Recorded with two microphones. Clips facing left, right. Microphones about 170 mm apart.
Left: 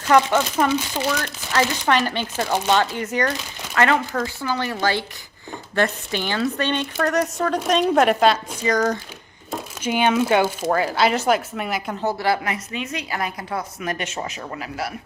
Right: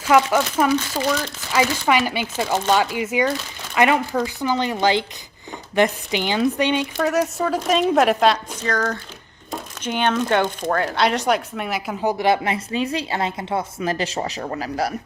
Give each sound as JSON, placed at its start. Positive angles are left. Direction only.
{"t": 0.0, "sound": "speech", "side_deg": -5}
{"t": 8.6, "sound": "speech", "side_deg": 15}
{"t": 12.0, "sound": "a woman's voice", "side_deg": -20}